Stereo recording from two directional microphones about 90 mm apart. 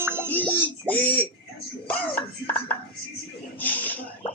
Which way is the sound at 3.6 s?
20° left (ahead or behind).